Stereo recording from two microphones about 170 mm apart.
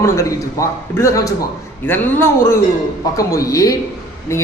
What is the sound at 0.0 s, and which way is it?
A woman's voice, 15° left (ahead or behind).